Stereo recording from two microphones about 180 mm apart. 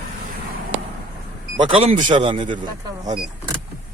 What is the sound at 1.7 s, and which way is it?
Speech, 35° right (ahead or behind).